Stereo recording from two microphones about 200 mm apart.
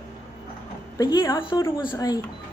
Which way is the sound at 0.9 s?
20° left (ahead or behind).